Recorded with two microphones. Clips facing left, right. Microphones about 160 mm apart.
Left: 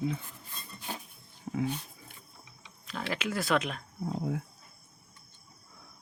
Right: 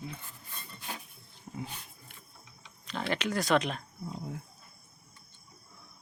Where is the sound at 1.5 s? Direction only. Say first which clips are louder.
Left 8 dB; 70° left (ahead or behind).